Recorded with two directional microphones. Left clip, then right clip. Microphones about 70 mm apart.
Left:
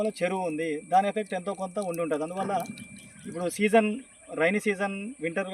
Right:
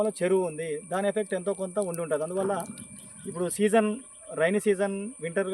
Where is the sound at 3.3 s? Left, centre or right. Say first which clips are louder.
Even; right.